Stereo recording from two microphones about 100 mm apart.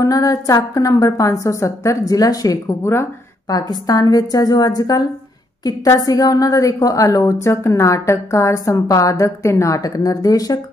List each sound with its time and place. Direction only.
0.0 s a woman's voice: 35° left (ahead or behind)
3.5 s a woman's voice: 40° left (ahead or behind)